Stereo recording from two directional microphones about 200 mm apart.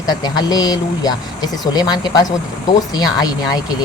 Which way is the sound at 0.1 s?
20° left (ahead or behind).